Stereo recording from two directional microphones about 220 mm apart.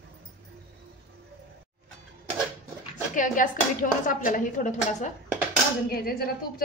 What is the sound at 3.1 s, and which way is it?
A woman's voice, 35° left (ahead or behind).